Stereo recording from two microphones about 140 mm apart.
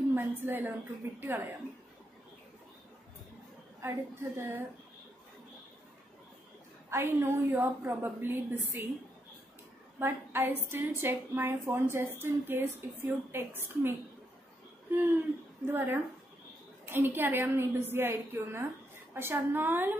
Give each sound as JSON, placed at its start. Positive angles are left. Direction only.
{"t": 0.1, "sound": "a woman's voice", "side_deg": -15}
{"t": 3.8, "sound": "a woman's voice", "side_deg": -15}
{"t": 6.9, "sound": "a woman's voice", "side_deg": -15}
{"t": 9.9, "sound": "a woman's voice", "side_deg": -15}